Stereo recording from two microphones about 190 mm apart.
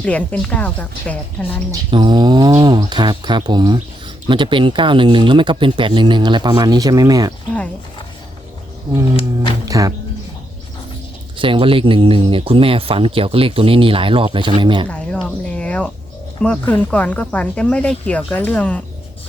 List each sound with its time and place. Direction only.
0.0 s speech: 5° left (ahead or behind)
1.9 s speech: 25° right (ahead or behind)
9.1 s speech: 30° left (ahead or behind)
9.6 s speech: 20° right (ahead or behind)
11.3 s speech: 25° right (ahead or behind)
14.8 s speech: 5° left (ahead or behind)